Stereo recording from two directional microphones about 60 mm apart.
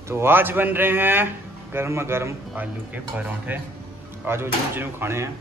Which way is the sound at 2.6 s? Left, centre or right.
Right.